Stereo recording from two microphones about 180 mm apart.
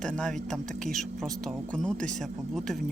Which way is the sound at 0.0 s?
5° left (ahead or behind).